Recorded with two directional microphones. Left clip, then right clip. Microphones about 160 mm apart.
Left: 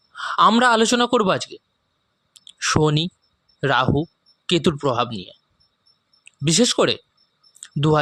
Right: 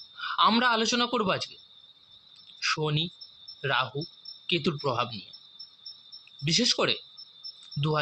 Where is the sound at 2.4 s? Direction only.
90° left; by 5.0 s 70° left (ahead or behind).